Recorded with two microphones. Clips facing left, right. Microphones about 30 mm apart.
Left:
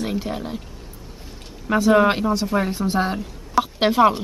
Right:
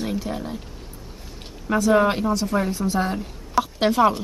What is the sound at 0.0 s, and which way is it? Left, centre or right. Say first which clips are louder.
Speech: left 1 dB; left.